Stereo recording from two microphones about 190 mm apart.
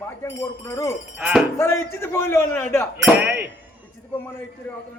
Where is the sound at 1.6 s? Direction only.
15° left (ahead or behind).